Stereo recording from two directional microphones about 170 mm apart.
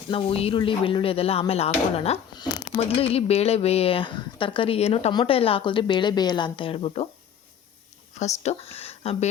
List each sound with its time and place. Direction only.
0.1 s speech: 35° left (ahead or behind)
8.1 s speech: 40° left (ahead or behind)